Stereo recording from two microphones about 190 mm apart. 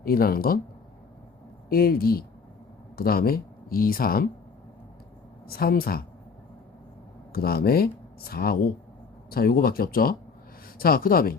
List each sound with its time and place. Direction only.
0.0 s speech: 50° left (ahead or behind)
1.7 s speech: 50° left (ahead or behind)
5.5 s speech: 50° left (ahead or behind)
7.3 s speech: 50° left (ahead or behind)